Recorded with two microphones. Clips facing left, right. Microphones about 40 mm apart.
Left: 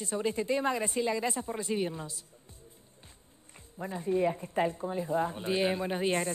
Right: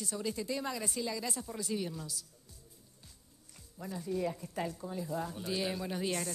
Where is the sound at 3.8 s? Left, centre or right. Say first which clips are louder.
Left 7 dB; left.